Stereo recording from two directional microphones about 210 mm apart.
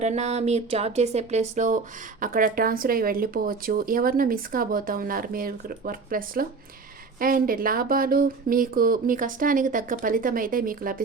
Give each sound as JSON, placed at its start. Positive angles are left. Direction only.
{"t": 0.0, "sound": "speech", "side_deg": -30}